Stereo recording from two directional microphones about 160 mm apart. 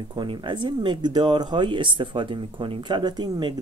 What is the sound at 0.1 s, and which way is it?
Speech, 30° right (ahead or behind).